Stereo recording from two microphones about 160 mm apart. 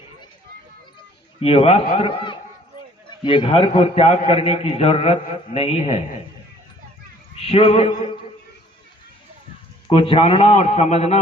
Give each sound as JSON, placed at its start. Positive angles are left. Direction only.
{"t": 1.4, "sound": "a man's voice", "side_deg": 40}
{"t": 7.3, "sound": "a man's voice", "side_deg": 35}
{"t": 9.9, "sound": "a man's voice", "side_deg": 35}